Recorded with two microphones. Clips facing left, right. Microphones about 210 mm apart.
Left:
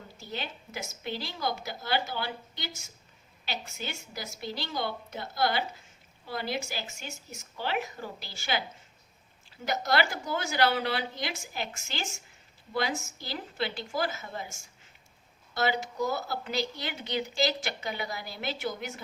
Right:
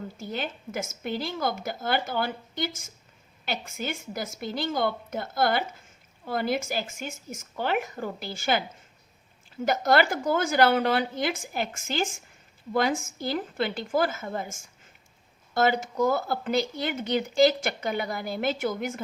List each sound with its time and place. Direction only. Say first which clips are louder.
0.2 s speech: right 4 dB; 50° right (ahead or behind)
9.6 s speech: right 6 dB; 50° right (ahead or behind)